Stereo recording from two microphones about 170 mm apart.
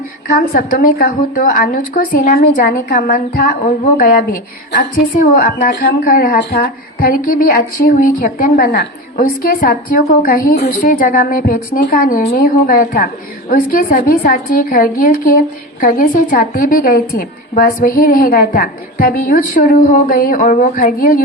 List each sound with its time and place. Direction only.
0.3 s a woman's voice: 55° left (ahead or behind)
5.1 s a woman's voice: 55° left (ahead or behind)